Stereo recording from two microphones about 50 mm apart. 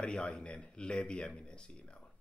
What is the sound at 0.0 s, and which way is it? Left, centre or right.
Speech, centre.